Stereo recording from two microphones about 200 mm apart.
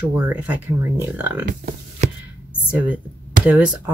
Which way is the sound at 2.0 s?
35° right (ahead or behind).